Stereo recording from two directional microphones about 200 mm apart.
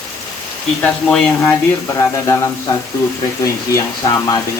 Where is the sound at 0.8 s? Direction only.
5° left (ahead or behind).